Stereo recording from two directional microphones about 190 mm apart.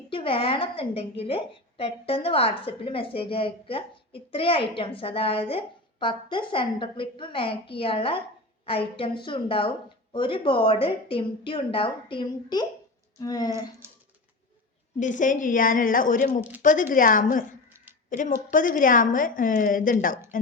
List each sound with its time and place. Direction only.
0.1 s a woman's voice: 30° left (ahead or behind)
14.9 s a woman's voice: 40° left (ahead or behind)